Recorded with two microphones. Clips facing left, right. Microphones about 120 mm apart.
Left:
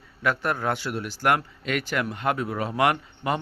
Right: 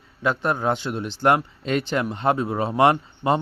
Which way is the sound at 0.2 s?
25° right (ahead or behind).